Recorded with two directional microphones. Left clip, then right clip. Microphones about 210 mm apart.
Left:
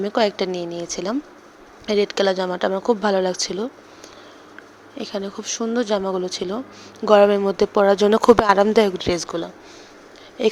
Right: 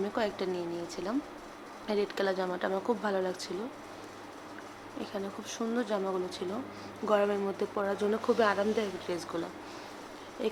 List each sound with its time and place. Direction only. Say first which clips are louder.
0.0 s speech: left 12 dB; 40° left (ahead or behind)
4.9 s speech: left 10 dB; 40° left (ahead or behind)